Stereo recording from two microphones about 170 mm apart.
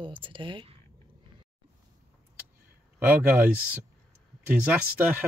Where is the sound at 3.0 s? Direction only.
15° right (ahead or behind).